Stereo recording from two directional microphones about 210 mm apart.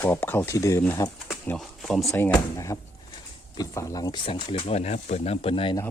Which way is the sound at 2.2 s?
15° left (ahead or behind).